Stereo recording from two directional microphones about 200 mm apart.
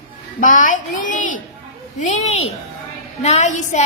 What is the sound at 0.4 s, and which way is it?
A woman's voice, 40° left (ahead or behind).